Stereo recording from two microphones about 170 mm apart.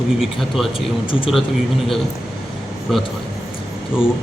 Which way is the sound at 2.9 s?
Centre (ahead or behind).